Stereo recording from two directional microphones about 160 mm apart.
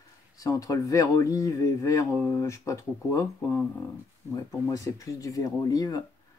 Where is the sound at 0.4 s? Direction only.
20° left (ahead or behind).